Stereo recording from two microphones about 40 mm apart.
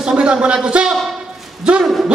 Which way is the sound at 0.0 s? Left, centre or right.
Right.